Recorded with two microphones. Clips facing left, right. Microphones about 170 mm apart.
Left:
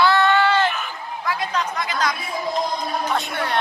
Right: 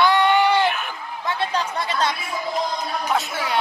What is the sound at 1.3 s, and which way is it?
Chatter, 30° right (ahead or behind).